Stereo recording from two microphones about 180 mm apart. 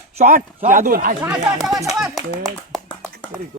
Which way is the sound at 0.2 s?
40° right (ahead or behind).